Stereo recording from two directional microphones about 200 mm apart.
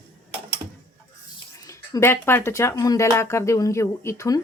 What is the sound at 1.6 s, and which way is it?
Speech, 15° left (ahead or behind).